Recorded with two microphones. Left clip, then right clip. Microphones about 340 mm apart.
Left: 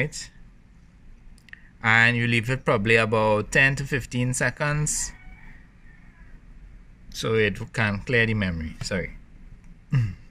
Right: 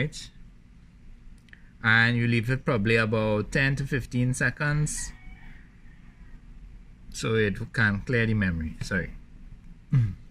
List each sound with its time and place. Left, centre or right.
0.0 s speech: centre
1.5 s speech: centre
7.1 s speech: centre
9.8 s a sound: centre